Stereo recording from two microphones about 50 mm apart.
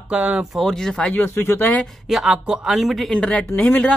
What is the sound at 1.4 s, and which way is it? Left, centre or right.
Speech, left.